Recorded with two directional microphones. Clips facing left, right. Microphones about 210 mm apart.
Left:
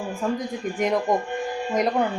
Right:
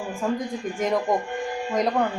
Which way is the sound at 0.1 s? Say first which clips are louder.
Right 1 dB; centre (ahead or behind).